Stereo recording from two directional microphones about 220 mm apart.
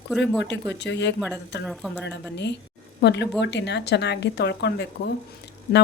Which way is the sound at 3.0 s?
50° left (ahead or behind).